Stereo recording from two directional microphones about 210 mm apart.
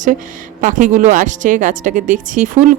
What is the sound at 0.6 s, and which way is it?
Speech, 40° right (ahead or behind).